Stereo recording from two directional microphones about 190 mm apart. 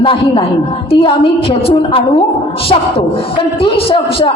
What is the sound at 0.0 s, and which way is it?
A woman's voice, 25° left (ahead or behind).